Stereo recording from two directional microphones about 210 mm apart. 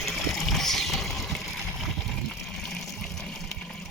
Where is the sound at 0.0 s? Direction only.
Centre (ahead or behind).